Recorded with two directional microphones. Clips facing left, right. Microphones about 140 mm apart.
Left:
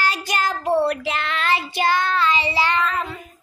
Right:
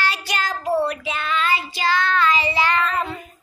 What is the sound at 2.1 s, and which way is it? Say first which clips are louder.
Speech: right 1 dB; 30° left (ahead or behind).